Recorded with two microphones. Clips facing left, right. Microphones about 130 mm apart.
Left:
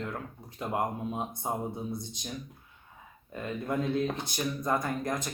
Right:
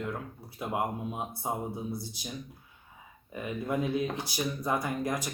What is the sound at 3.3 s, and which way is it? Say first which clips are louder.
Speech: even; 10° right (ahead or behind).